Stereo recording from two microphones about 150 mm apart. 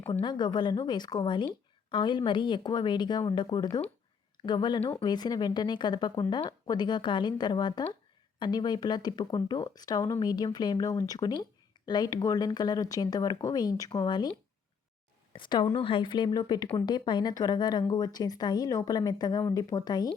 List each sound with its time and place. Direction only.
0.1 s a woman's voice: 30° left (ahead or behind)